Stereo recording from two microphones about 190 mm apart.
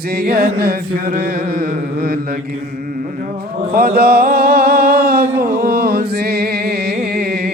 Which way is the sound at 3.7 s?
55° right (ahead or behind).